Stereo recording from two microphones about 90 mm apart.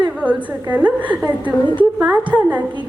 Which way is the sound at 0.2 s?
15° right (ahead or behind).